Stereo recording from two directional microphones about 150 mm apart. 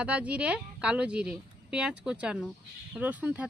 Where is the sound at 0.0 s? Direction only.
10° right (ahead or behind).